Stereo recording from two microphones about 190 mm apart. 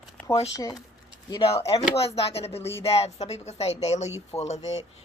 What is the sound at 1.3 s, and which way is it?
Speech, 30° left (ahead or behind).